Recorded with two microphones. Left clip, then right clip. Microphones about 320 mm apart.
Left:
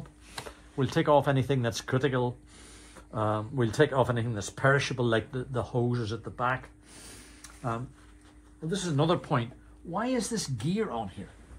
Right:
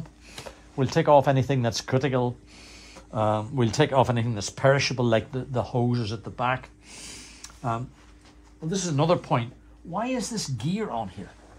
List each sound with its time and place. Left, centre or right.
0.5 s speech: centre